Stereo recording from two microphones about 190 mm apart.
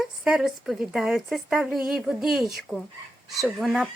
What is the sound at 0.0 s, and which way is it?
Speech, centre (ahead or behind).